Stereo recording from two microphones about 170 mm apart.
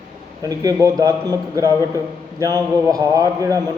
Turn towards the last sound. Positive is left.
turn(degrees=-20)  # may be behind; listen again after turning